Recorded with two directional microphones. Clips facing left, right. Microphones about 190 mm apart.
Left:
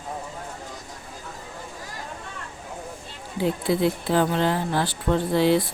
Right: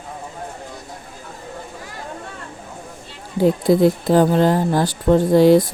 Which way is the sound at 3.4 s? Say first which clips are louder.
Right 8 dB; 40° right (ahead or behind).